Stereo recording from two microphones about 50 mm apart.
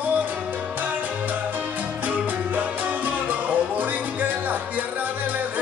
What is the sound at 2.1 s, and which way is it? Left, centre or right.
Music, right.